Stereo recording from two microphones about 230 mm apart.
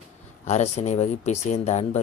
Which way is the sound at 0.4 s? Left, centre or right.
Left.